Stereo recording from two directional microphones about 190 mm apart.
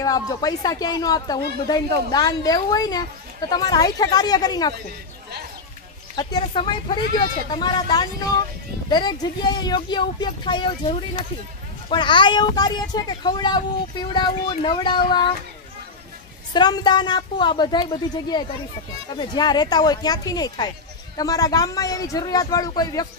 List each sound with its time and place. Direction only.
0.0 s speech: 20° left (ahead or behind)
6.1 s speech: 25° left (ahead or behind)
16.5 s speech: 20° left (ahead or behind)